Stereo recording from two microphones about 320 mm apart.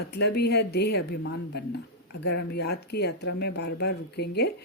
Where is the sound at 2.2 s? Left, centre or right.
Left.